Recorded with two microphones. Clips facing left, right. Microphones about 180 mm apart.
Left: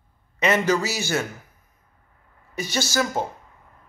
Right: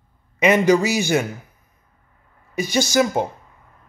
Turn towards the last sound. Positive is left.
turn(degrees=-15)  # may be behind; listen again after turning